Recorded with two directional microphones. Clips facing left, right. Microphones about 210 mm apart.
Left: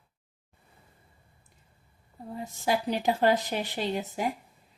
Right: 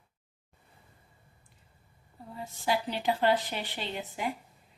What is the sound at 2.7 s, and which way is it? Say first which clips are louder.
A woman's voice: left 3 dB; 45° left (ahead or behind).